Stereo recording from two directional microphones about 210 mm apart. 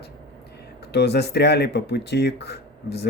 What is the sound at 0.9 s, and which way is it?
Speech, 50° left (ahead or behind).